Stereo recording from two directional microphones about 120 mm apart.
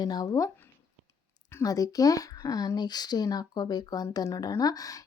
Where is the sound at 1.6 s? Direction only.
30° left (ahead or behind).